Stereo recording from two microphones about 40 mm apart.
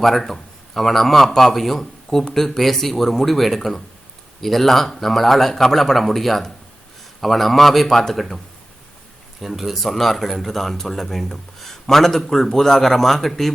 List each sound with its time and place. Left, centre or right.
0.0 s a man's voice: centre
9.4 s speech: centre